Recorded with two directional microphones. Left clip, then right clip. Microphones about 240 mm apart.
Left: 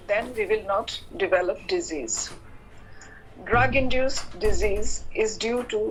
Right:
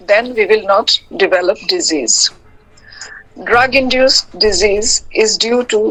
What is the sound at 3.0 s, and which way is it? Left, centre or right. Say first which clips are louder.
A woman's voice: right 12 dB; right.